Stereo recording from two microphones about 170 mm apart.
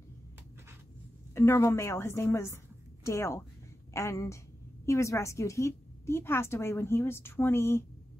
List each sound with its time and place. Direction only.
1.3 s a woman's voice: 15° left (ahead or behind)